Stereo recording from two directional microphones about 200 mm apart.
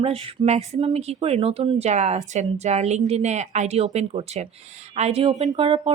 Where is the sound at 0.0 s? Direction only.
30° right (ahead or behind).